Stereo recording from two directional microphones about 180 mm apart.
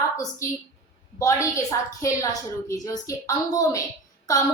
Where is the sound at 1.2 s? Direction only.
15° left (ahead or behind).